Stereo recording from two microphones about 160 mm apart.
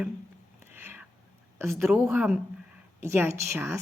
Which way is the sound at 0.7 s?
15° right (ahead or behind).